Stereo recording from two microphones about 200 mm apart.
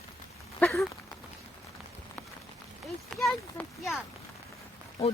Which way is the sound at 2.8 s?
Centre (ahead or behind).